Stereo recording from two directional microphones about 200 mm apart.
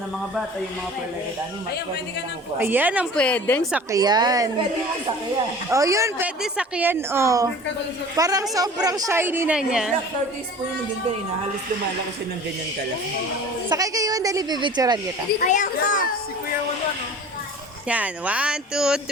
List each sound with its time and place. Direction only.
2.6 s a woman's voice: 10° right (ahead or behind)
3.2 s a woman's voice: 5° left (ahead or behind)
3.9 s a woman's voice: 20° right (ahead or behind)
5.7 s a woman's voice: 15° right (ahead or behind)
13.7 s a woman's voice: 15° right (ahead or behind)
15.4 s a child's voice: 40° left (ahead or behind)
17.8 s speech: 5° right (ahead or behind)